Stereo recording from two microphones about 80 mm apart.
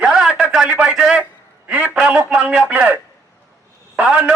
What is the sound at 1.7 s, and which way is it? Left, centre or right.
A man's voice, centre.